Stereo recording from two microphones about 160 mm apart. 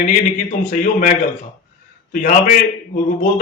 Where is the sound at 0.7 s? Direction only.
55° left (ahead or behind).